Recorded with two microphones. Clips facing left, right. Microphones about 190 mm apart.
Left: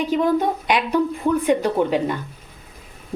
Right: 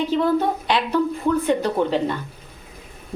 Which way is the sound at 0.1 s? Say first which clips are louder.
Left 2 dB; 15° left (ahead or behind).